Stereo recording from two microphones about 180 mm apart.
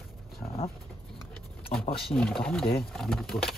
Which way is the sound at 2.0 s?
5° left (ahead or behind).